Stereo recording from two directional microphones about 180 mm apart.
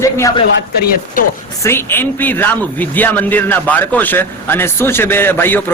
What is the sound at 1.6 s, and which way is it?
A man's voice, 15° left (ahead or behind).